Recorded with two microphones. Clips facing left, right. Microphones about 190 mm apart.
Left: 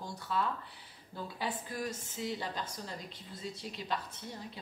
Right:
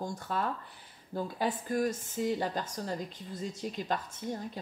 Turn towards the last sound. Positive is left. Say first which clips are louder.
# right 7 dB
turn(degrees=-45)  # may be behind; listen again after turning